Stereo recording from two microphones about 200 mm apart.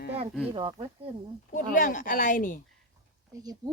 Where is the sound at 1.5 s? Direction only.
40° left (ahead or behind).